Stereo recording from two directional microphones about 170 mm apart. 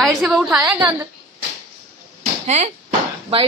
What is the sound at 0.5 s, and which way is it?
Speech, 20° right (ahead or behind).